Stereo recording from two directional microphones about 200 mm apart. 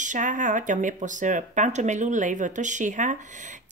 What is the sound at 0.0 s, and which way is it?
Speech, 40° right (ahead or behind).